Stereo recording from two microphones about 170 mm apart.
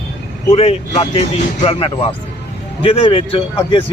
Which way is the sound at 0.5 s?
35° left (ahead or behind).